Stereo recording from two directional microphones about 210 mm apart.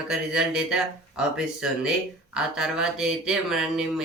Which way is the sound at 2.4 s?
Centre (ahead or behind).